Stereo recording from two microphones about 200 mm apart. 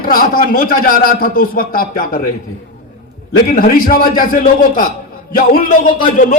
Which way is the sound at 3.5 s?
45° left (ahead or behind).